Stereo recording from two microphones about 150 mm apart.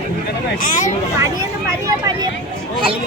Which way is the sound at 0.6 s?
60° left (ahead or behind).